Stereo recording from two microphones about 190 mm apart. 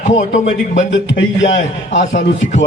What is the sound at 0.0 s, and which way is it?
A man's voice, 40° left (ahead or behind).